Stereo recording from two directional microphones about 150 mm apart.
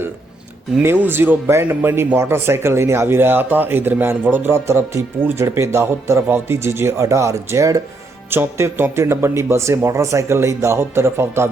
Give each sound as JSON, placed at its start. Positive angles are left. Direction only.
{"t": 0.8, "sound": "speech", "side_deg": -15}